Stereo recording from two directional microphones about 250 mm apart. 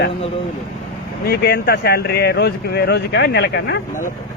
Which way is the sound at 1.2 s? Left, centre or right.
Left.